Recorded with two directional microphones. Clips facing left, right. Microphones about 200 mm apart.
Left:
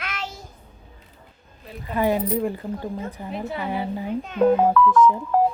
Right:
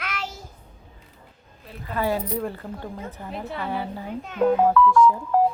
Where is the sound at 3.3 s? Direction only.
Centre (ahead or behind).